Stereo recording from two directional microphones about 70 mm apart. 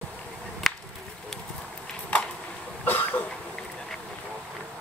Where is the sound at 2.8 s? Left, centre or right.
Left.